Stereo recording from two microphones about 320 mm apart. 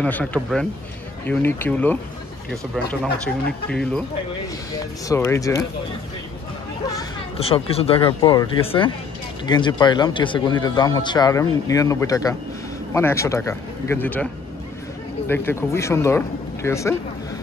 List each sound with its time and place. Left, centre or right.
0.0 s speech: centre
6.9 s speech: centre